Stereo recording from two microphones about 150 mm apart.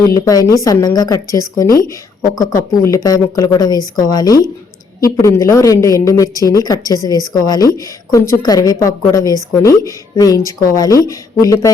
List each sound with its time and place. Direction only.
0.1 s a woman's voice: 25° left (ahead or behind)